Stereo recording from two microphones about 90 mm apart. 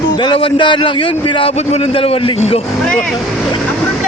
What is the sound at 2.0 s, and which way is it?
Speech, 90° left.